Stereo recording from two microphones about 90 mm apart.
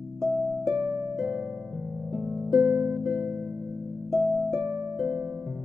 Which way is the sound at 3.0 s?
Centre (ahead or behind).